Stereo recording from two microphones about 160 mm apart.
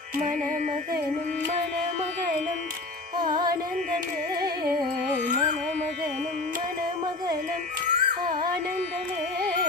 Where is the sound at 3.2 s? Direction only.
25° right (ahead or behind).